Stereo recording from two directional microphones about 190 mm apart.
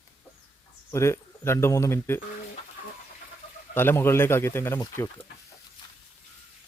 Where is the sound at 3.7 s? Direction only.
10° left (ahead or behind).